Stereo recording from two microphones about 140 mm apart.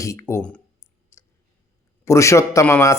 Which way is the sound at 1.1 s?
20° left (ahead or behind).